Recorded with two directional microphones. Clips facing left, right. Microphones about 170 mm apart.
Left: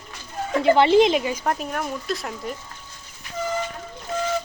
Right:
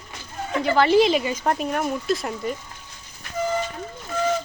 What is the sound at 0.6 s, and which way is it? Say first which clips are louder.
Speech: left 2 dB; 25° left (ahead or behind).